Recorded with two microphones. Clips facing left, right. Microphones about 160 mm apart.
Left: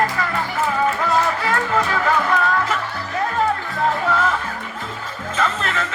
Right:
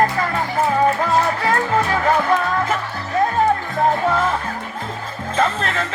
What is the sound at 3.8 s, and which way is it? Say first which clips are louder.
Music: right 1 dB; 30° right (ahead or behind).